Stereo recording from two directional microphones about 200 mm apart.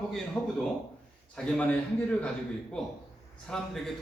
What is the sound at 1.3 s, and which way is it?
Speech, 5° left (ahead or behind).